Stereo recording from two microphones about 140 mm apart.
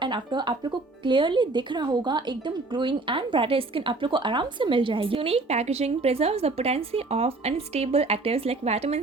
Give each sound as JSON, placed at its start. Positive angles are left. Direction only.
{"t": 0.0, "sound": "a woman's voice", "side_deg": -35}